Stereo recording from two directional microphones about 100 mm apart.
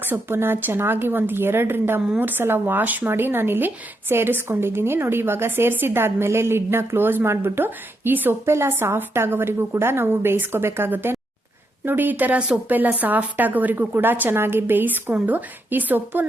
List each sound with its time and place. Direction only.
0.0 s a woman's voice: 20° right (ahead or behind)